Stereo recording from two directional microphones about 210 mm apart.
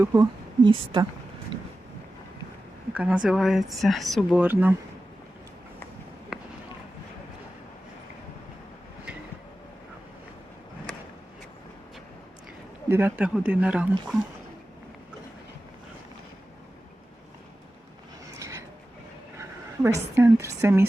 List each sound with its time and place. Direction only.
0.0 s a woman's voice: 15° right (ahead or behind)
2.9 s speech: 5° right (ahead or behind)
12.9 s speech: 10° right (ahead or behind)
18.3 s a sound: 15° right (ahead or behind)
19.4 s a woman's voice: 15° right (ahead or behind)